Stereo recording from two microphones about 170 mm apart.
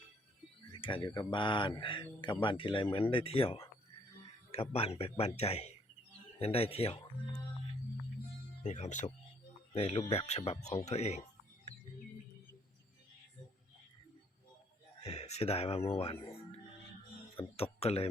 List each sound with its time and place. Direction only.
0.7 s speech: 30° left (ahead or behind)
8.6 s speech: 45° left (ahead or behind)
15.0 s a sound: 40° left (ahead or behind)
15.9 s speech: 35° left (ahead or behind)
17.3 s speech: 35° left (ahead or behind)